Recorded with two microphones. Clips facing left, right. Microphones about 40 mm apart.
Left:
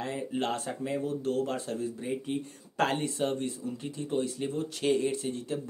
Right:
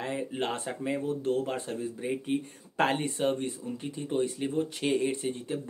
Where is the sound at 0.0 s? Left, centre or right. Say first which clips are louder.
Even; centre.